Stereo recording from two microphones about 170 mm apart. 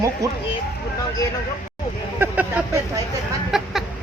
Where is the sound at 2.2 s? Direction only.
10° right (ahead or behind).